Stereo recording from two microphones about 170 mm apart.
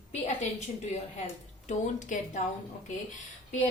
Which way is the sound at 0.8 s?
45° left (ahead or behind).